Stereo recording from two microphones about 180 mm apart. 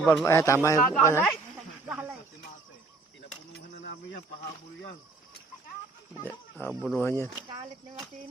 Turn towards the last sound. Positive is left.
turn(degrees=15)  # may be behind; listen again after turning